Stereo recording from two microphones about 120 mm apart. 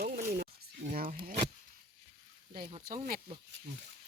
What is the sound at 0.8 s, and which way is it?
Speech, 90° right.